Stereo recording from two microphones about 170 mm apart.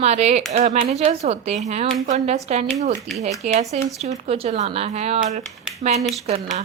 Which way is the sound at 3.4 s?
40° right (ahead or behind).